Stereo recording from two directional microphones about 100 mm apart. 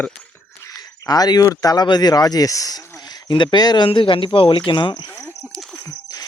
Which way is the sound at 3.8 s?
60° left (ahead or behind).